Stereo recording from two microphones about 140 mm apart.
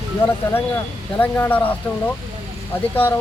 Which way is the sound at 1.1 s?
15° left (ahead or behind).